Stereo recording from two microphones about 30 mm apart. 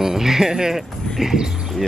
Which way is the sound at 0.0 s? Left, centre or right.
Centre.